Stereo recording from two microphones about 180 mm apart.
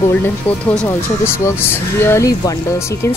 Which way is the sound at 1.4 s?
15° left (ahead or behind).